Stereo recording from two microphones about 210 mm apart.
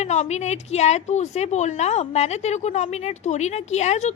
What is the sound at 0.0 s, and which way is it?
A woman's voice, 35° left (ahead or behind).